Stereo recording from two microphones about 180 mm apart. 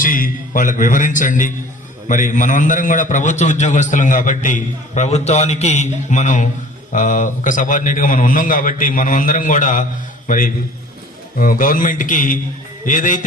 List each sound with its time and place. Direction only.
0.0 s a man's voice: 50° left (ahead or behind)